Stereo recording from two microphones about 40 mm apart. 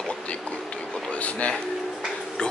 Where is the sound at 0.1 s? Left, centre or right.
Left.